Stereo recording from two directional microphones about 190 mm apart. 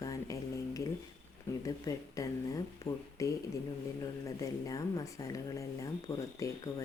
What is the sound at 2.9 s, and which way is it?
Speech, 30° left (ahead or behind).